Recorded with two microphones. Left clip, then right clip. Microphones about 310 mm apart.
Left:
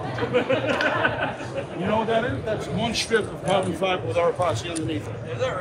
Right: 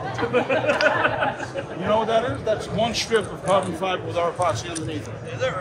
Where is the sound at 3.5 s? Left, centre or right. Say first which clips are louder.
Right 1 dB; centre.